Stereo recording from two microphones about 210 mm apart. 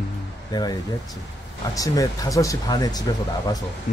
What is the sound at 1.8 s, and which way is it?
Speech, 15° left (ahead or behind).